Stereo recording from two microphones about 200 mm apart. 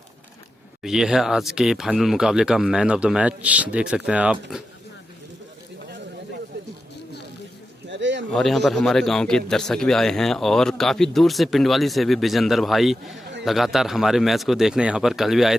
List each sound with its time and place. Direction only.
0.8 s a man's voice: centre (ahead or behind)
7.9 s a sound: 65° right (ahead or behind)
8.3 s a man's voice: centre (ahead or behind)